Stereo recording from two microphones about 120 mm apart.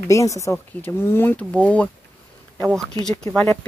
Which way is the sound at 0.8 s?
15° left (ahead or behind).